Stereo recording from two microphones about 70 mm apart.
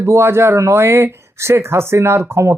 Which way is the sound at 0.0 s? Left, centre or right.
Right.